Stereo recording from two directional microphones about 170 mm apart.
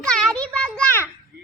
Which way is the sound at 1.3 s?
65° right (ahead or behind).